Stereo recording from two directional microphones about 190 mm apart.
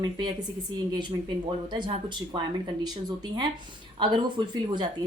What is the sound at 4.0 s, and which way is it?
Speech, 25° right (ahead or behind).